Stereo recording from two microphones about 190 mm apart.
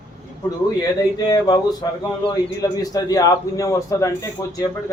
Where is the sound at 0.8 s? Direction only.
20° left (ahead or behind).